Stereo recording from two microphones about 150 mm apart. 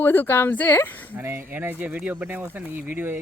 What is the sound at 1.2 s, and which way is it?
A man's voice, 15° right (ahead or behind).